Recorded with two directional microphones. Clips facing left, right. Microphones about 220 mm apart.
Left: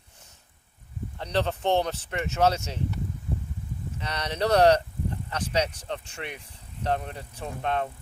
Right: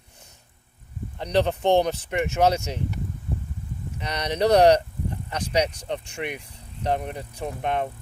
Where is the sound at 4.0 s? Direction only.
15° right (ahead or behind).